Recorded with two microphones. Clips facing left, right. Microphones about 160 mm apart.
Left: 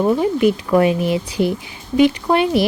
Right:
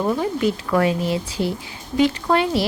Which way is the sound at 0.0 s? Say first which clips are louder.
Left 5 dB; 15° left (ahead or behind).